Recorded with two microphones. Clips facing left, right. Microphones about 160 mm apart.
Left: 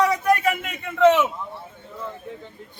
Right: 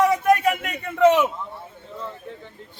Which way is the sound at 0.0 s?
25° right (ahead or behind).